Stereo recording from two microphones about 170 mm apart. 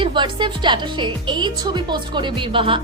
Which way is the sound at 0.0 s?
30° right (ahead or behind).